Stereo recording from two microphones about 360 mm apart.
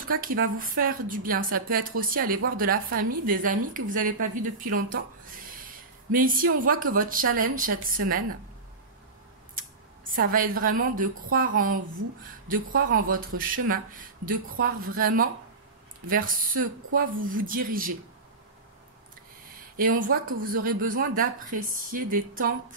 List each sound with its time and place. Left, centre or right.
0.0 s speech: right
10.1 s speech: right
19.8 s speech: right